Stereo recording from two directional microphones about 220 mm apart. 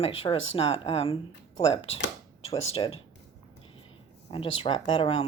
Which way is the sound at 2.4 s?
25° left (ahead or behind).